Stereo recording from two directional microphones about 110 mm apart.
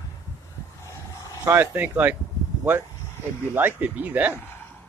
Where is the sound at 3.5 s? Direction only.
15° right (ahead or behind).